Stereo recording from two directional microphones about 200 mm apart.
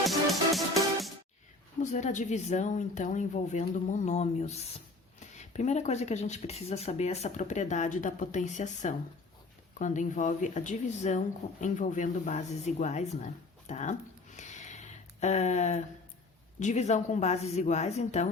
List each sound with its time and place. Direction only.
0.0 s music: centre (ahead or behind)
1.8 s speech: 35° left (ahead or behind)
14.3 s a sound: 35° left (ahead or behind)
15.2 s speech: 35° left (ahead or behind)